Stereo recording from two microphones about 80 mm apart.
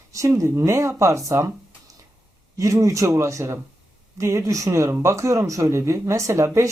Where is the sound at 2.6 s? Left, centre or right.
Right.